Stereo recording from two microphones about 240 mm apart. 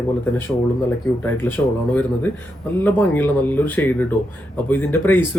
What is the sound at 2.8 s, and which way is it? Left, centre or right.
Speech, centre.